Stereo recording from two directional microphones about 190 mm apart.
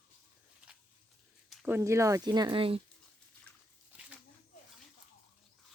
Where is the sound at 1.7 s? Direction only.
15° right (ahead or behind).